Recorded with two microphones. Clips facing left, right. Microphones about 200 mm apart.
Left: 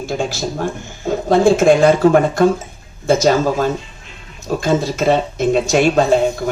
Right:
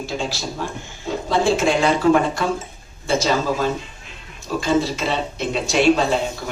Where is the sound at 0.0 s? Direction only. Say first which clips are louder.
Left 5 dB; 50° left (ahead or behind).